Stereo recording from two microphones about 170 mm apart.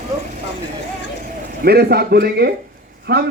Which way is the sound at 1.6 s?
70° right (ahead or behind).